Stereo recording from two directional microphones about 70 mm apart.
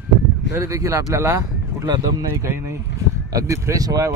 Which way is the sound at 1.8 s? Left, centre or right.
Right.